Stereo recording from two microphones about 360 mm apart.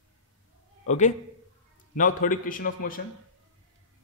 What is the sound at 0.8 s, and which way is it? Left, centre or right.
A man's voice, centre.